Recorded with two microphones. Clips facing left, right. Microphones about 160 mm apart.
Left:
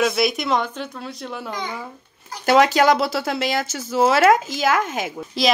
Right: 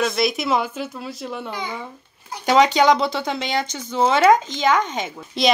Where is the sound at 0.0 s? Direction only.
Centre (ahead or behind).